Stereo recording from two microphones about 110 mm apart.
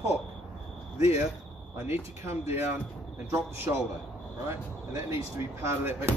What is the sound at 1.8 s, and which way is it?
Speech, 20° right (ahead or behind).